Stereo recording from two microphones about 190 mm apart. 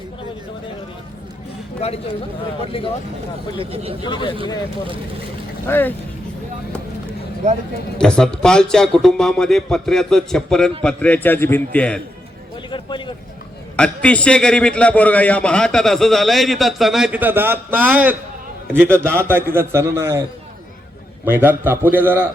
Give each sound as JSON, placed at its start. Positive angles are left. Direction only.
{"t": 1.8, "sound": "speech", "side_deg": 30}
{"t": 3.6, "sound": "speech", "side_deg": -30}
{"t": 4.0, "sound": "speech", "side_deg": 25}
{"t": 5.6, "sound": "a man's voice", "side_deg": 10}
{"t": 7.4, "sound": "speech", "side_deg": -35}
{"t": 7.9, "sound": "a man's voice", "side_deg": 5}
{"t": 12.7, "sound": "a sound", "side_deg": 25}
{"t": 13.7, "sound": "a man's voice", "side_deg": 5}
{"t": 21.2, "sound": "a man's voice", "side_deg": -10}